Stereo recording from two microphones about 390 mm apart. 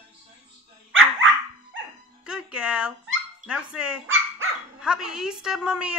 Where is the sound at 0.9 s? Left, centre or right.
Right.